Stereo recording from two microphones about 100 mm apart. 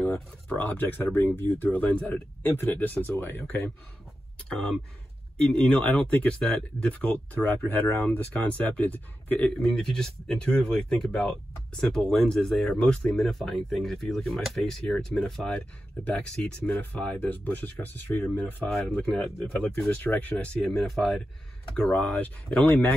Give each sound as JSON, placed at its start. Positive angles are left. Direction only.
{"t": 0.0, "sound": "speech", "side_deg": 20}
{"t": 4.5, "sound": "speech", "side_deg": 5}
{"t": 9.6, "sound": "speech", "side_deg": 5}
{"t": 18.7, "sound": "speech", "side_deg": 0}
{"t": 19.9, "sound": "speech", "side_deg": 15}